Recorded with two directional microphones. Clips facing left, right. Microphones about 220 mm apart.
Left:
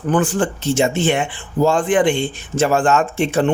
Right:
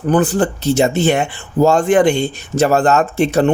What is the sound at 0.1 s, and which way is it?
Speech, 40° right (ahead or behind).